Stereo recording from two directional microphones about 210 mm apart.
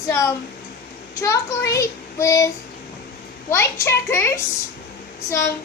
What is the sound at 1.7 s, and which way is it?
Child singing, 15° left (ahead or behind).